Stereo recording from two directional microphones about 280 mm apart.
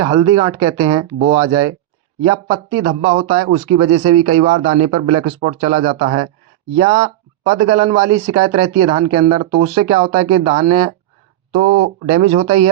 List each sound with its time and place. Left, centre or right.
0.0 s speech: centre
2.7 s speech: right